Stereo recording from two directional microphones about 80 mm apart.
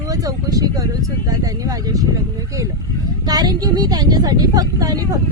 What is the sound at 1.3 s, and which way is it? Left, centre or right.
Speech, right.